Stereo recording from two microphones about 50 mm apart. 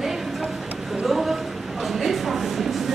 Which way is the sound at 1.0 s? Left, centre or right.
Centre.